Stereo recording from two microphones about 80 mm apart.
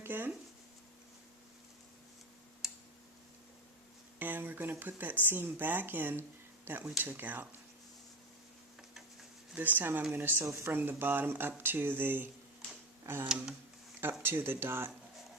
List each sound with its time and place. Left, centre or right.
0.0 s speech: right
2.6 s tick-tock: centre
4.2 s speech: right
9.6 s speech: right
13.2 s a sound: centre
14.0 s speech: right